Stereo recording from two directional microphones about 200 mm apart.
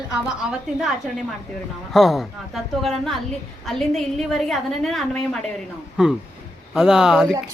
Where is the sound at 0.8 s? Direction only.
5° right (ahead or behind).